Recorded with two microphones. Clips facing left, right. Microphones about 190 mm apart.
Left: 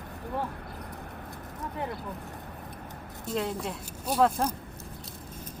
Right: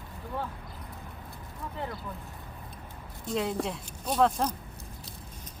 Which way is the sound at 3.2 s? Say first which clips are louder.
Right 1 dB; centre (ahead or behind).